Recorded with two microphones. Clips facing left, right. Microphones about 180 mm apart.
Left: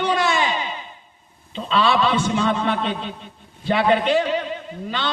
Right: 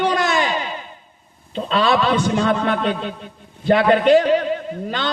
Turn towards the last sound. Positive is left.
turn(degrees=-45)  # may be behind; listen again after turning